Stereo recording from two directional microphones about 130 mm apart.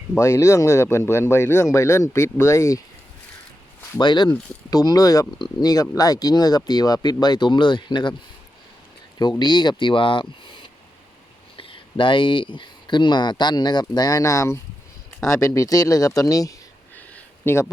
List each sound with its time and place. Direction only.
0.2 s speech: 20° left (ahead or behind)
4.0 s speech: 35° left (ahead or behind)
9.4 s speech: 35° left (ahead or behind); by 17.7 s 20° left (ahead or behind)